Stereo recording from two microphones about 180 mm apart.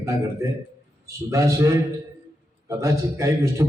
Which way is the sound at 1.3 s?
15° right (ahead or behind).